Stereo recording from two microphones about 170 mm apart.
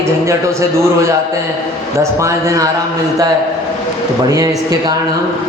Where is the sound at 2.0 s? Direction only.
15° right (ahead or behind).